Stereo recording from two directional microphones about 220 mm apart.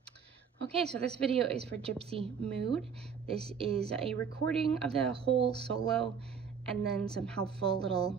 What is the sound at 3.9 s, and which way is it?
Speech, centre (ahead or behind).